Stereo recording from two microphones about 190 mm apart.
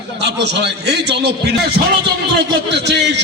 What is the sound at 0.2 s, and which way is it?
A man's voice, 65° right (ahead or behind).